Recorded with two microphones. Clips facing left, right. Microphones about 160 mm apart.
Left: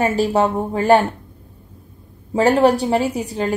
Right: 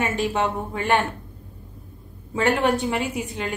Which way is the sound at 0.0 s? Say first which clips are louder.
Left 6 dB; 35° left (ahead or behind).